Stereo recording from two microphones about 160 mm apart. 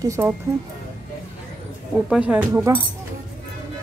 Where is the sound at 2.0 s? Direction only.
5° right (ahead or behind).